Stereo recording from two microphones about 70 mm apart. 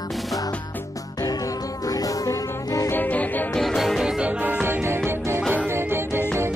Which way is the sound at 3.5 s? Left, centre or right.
Centre.